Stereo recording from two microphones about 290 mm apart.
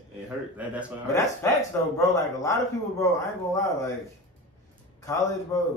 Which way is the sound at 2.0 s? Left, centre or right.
Centre.